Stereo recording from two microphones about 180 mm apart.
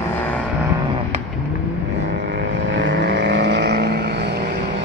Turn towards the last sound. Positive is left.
turn(degrees=-70)  # may be behind; listen again after turning